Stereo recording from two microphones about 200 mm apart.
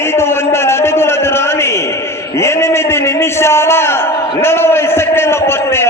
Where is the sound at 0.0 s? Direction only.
10° left (ahead or behind).